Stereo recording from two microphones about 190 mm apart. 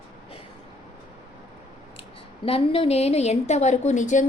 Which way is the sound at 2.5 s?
30° left (ahead or behind).